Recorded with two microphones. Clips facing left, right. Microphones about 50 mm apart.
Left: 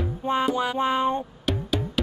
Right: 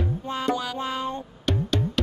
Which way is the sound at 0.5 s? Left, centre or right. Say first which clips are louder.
Left 5 dB; left.